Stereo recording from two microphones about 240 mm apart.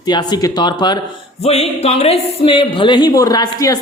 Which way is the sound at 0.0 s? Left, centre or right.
Centre.